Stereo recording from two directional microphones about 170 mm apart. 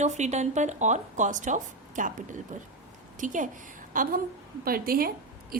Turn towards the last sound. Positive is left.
turn(degrees=-60)  # may be behind; listen again after turning